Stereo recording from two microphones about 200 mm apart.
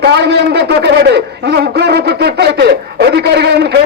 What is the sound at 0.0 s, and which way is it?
A man's voice, 55° right (ahead or behind).